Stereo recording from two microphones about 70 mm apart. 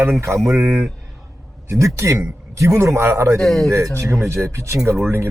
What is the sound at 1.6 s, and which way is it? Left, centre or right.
A man's voice, right.